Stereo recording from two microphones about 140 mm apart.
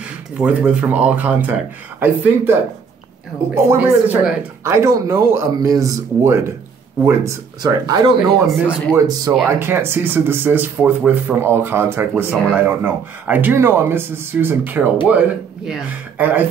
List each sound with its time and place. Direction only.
0.4 s speech: 10° right (ahead or behind)
3.5 s speech: 15° right (ahead or behind)
8.2 s speech: 5° right (ahead or behind)
8.9 s speech: 30° right (ahead or behind)
9.5 s speech: 15° right (ahead or behind)